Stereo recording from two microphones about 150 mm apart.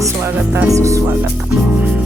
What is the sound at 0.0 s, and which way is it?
Speech, 15° right (ahead or behind).